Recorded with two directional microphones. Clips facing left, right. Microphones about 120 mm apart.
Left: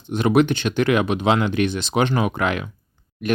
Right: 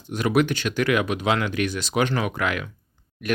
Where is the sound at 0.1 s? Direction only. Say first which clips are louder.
Left 4 dB; 25° left (ahead or behind).